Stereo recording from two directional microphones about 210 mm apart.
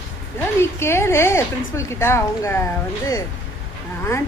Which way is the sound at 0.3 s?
10° left (ahead or behind).